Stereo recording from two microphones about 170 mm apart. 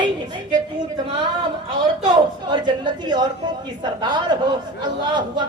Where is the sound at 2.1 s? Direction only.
25° right (ahead or behind).